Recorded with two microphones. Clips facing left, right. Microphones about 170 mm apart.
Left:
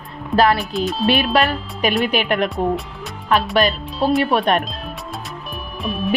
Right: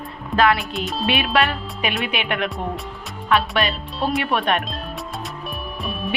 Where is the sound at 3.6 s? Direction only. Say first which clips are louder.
Left 5 dB; 40° left (ahead or behind).